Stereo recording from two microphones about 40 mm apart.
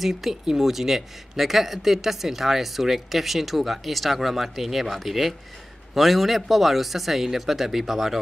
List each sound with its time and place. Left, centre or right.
0.0 s speech: centre